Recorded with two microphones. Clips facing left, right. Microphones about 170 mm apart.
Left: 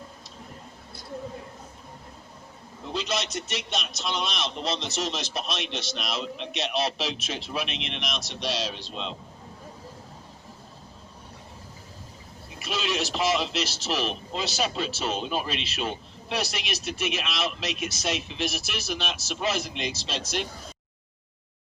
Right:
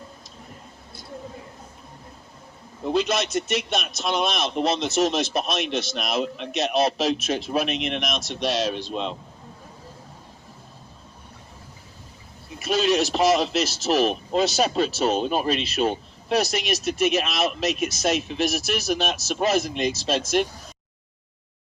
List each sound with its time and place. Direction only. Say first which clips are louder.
2.8 s a man's voice: right 7 dB; 55° right (ahead or behind)
12.5 s a man's voice: right 8 dB; 45° right (ahead or behind)